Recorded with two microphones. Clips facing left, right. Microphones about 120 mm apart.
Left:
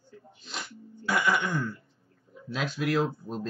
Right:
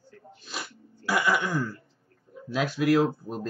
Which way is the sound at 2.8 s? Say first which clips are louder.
Right 5 dB; centre (ahead or behind).